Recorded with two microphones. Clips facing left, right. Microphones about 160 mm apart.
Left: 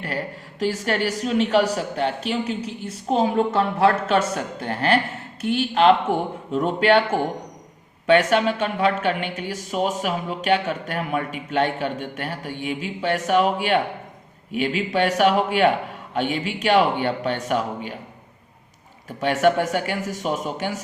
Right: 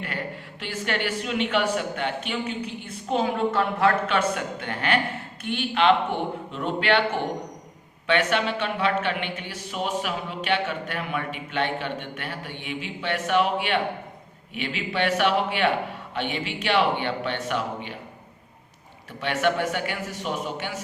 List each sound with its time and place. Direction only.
0.6 s speech: 40° left (ahead or behind)
19.2 s speech: 45° left (ahead or behind)